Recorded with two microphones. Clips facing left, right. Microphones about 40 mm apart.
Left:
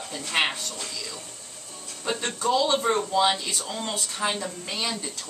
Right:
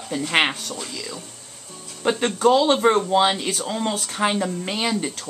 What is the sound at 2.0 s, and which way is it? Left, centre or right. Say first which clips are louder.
Speech: right 8 dB; right.